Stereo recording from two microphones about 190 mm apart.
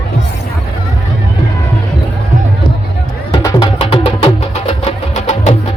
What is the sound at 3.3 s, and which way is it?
Music, 25° left (ahead or behind).